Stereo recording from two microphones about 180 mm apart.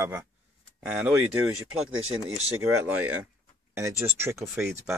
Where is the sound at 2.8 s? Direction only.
10° right (ahead or behind).